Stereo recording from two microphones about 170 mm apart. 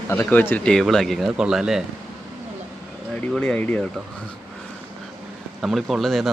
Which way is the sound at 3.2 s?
5° left (ahead or behind).